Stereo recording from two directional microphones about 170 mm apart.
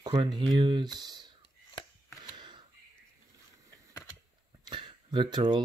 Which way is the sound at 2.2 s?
25° right (ahead or behind).